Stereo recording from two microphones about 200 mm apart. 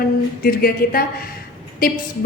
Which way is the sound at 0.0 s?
45° left (ahead or behind).